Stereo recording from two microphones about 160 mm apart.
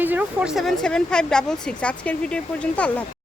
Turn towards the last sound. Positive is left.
turn(degrees=5)  # may be behind; listen again after turning